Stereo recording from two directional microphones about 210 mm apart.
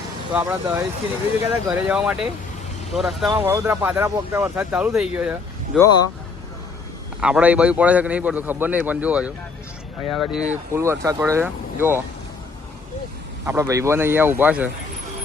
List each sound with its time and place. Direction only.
0.3 s a man's voice: 10° right (ahead or behind)
5.7 s speech: 15° left (ahead or behind)
7.2 s a man's voice: 5° right (ahead or behind)
13.4 s a man's voice: 15° right (ahead or behind)